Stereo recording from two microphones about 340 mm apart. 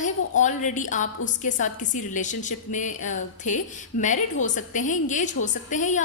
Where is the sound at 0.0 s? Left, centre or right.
Left.